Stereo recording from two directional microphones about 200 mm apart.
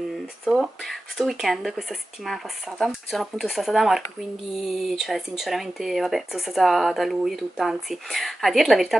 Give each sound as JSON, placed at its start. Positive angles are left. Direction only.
{"t": 0.5, "sound": "speech", "side_deg": 0}